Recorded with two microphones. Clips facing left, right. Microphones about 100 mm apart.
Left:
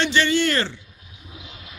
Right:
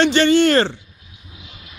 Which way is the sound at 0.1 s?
60° right (ahead or behind).